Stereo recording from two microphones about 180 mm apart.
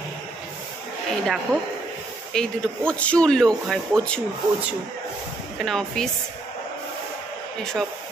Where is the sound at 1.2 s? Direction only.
Centre (ahead or behind).